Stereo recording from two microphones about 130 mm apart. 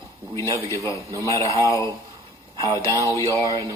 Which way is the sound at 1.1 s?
25° right (ahead or behind).